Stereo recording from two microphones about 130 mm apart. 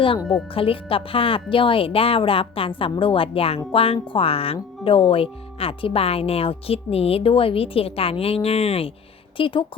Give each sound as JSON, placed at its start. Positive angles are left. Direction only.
{"t": 0.5, "sound": "speech", "side_deg": 45}